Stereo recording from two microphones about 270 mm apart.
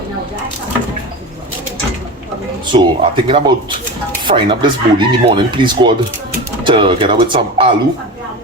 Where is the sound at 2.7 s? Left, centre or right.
Centre.